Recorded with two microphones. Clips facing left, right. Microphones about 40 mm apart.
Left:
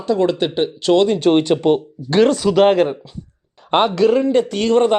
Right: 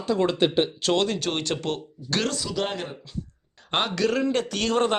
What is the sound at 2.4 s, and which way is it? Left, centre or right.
Speech, left.